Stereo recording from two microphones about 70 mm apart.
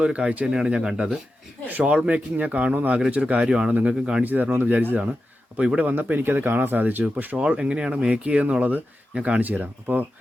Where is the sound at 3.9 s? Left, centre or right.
Centre.